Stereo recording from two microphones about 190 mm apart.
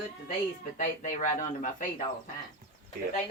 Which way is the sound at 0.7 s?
45° left (ahead or behind).